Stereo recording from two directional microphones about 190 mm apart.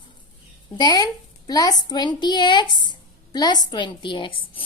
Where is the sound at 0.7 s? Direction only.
20° left (ahead or behind).